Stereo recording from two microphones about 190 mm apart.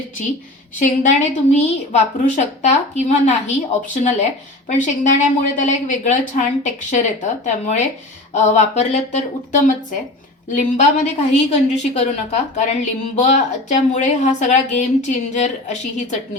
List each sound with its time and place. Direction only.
0.8 s a woman's voice: 40° left (ahead or behind)